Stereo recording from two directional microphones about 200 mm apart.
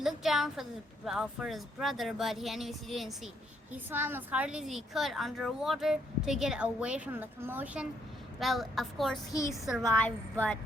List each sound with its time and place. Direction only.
0.0 s a woman's voice: centre (ahead or behind)
9.3 s speech: 15° left (ahead or behind)